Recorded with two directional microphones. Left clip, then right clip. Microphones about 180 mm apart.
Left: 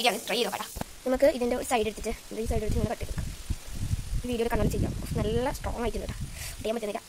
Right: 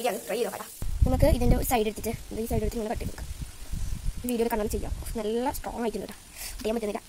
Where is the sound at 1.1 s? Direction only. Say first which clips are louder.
Left 2 dB; 20° right (ahead or behind).